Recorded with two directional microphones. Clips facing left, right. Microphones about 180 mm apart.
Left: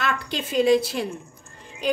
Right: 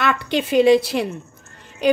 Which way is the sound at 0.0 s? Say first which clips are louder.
Right 6 dB; 70° right (ahead or behind).